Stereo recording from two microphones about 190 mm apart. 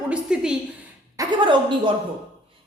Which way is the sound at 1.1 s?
25° right (ahead or behind).